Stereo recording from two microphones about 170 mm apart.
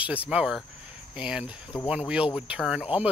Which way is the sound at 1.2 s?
5° right (ahead or behind).